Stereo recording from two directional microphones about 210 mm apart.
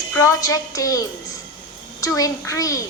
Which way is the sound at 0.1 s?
15° left (ahead or behind).